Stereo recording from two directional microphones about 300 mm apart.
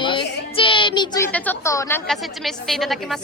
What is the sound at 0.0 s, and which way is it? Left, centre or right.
A woman's voice, centre.